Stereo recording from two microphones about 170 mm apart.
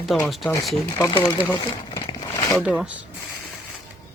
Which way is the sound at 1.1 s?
25° left (ahead or behind).